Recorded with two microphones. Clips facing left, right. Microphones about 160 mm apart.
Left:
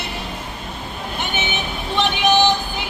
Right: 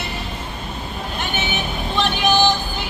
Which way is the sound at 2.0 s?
20° left (ahead or behind).